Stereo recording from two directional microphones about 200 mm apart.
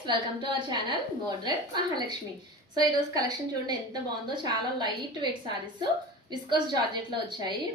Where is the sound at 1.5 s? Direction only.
20° right (ahead or behind).